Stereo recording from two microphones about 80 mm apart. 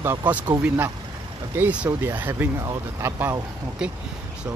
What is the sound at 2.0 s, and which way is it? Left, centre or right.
Speech, right.